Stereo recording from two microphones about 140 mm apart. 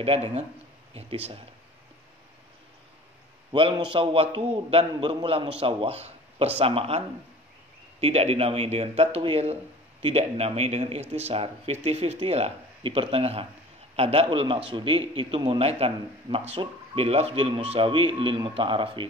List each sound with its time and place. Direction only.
0.0 s speech: 45° right (ahead or behind)
3.7 s a man's voice: 35° right (ahead or behind)
8.0 s a man's voice: 45° right (ahead or behind)